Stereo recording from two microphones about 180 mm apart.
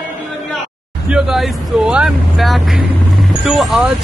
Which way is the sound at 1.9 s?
Centre (ahead or behind).